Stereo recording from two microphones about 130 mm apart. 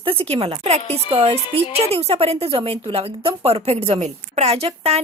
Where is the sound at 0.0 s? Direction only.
45° right (ahead or behind).